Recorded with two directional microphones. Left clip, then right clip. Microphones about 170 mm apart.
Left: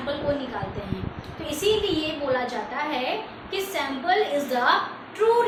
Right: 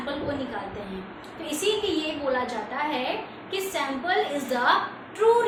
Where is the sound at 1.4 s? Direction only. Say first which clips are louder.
Left 3 dB; centre (ahead or behind).